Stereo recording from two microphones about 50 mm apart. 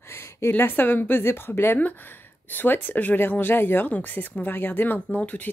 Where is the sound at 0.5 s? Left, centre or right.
Left.